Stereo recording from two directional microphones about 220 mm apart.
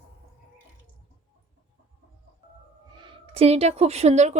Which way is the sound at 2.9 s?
20° right (ahead or behind).